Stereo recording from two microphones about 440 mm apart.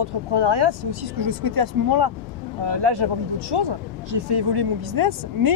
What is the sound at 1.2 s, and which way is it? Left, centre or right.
Speech, right.